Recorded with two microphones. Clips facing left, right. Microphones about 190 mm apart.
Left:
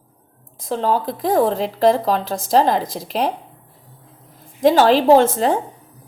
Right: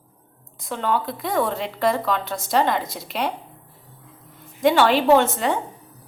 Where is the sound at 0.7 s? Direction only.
35° left (ahead or behind).